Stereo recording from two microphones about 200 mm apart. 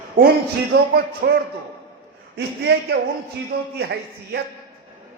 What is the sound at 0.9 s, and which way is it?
A man's voice, 50° right (ahead or behind).